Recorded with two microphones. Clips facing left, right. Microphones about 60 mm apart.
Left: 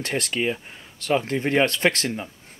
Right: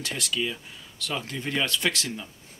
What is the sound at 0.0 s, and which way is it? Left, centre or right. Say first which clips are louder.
Speech: left 5 dB; left.